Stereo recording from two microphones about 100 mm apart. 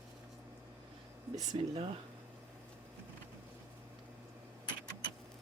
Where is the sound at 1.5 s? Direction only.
60° right (ahead or behind).